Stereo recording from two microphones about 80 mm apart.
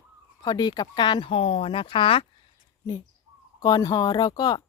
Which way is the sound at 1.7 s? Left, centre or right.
Left.